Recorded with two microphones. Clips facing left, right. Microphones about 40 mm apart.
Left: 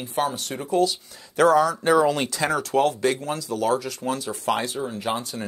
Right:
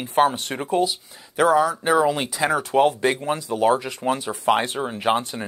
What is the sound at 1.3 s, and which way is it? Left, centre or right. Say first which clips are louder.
Speech: even; centre.